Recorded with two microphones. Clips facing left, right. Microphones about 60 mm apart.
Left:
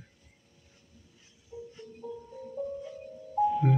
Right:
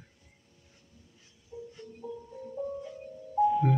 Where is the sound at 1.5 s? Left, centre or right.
Centre.